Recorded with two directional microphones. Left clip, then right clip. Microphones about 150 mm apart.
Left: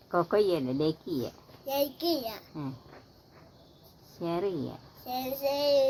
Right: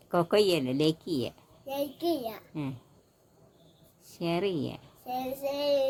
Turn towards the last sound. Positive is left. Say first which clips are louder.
# left 2 dB
turn(degrees=-25)  # may be behind; listen again after turning